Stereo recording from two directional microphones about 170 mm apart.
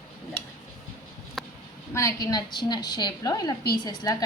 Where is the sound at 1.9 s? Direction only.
20° left (ahead or behind).